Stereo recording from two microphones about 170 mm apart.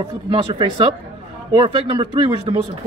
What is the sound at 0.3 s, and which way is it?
Speech, 30° right (ahead or behind).